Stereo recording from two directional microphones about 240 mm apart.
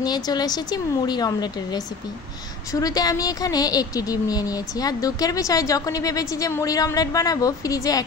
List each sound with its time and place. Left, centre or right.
0.0 s speech: centre